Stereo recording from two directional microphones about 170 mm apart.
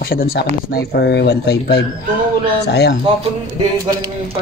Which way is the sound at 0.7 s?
80° left.